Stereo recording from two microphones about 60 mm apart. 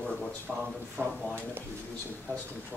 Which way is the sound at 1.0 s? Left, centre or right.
Right.